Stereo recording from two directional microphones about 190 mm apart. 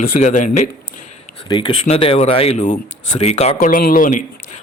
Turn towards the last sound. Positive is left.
turn(degrees=45)  # may be behind; listen again after turning